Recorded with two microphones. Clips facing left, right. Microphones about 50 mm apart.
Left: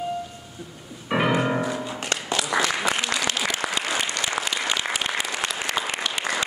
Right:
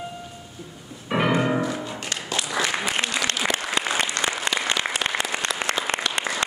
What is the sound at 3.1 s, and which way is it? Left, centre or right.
Applause, left.